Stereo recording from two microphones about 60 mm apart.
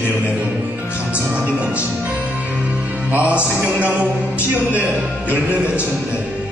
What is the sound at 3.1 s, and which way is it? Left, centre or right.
A man's voice, right.